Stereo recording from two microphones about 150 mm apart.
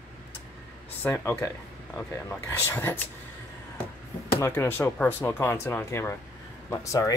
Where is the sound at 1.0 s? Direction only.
15° left (ahead or behind).